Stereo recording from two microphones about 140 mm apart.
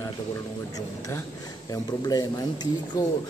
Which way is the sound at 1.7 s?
25° left (ahead or behind).